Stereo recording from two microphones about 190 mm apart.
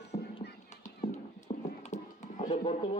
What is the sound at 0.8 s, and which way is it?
Clip-clop, 40° left (ahead or behind).